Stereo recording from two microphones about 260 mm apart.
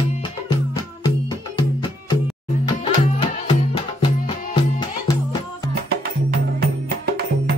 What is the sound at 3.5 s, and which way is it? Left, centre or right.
Music, centre.